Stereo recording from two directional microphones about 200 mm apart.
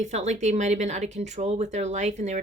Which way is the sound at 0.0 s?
35° right (ahead or behind).